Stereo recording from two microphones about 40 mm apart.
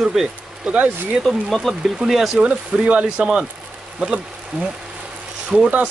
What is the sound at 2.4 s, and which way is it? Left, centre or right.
Speech, right.